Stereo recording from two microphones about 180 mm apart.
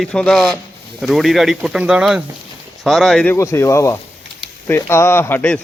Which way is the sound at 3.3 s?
15° left (ahead or behind).